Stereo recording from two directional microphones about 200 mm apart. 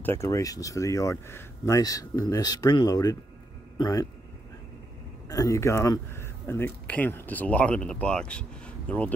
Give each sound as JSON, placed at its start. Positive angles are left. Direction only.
{"t": 0.0, "sound": "a man's voice", "side_deg": 15}
{"t": 5.3, "sound": "speech", "side_deg": 15}